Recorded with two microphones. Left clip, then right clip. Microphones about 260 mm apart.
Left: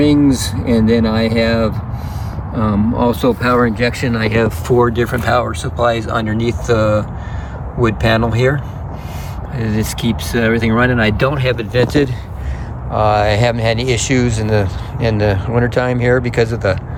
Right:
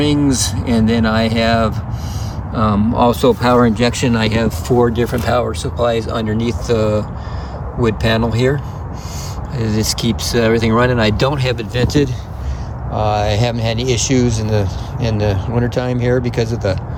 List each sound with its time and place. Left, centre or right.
0.0 s speech: centre
10.2 s speech: centre